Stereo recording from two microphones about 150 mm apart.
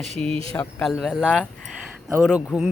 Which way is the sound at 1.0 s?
5° right (ahead or behind).